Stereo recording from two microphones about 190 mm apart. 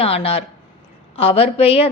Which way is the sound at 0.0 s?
30° left (ahead or behind).